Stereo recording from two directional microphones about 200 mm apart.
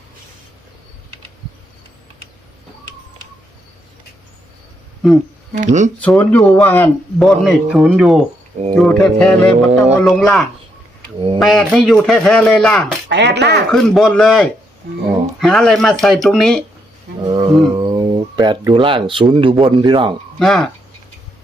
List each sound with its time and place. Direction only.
5.5 s speech: 35° right (ahead or behind)
6.0 s a man's voice: 5° left (ahead or behind)
13.1 s speech: 60° right (ahead or behind)
13.7 s a man's voice: centre (ahead or behind)
17.2 s wild animals: 25° right (ahead or behind)
17.7 s speech: 25° right (ahead or behind)
20.4 s a man's voice: centre (ahead or behind)